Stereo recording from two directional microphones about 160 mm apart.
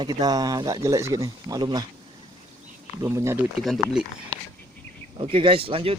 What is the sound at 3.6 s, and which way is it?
Speech, centre (ahead or behind).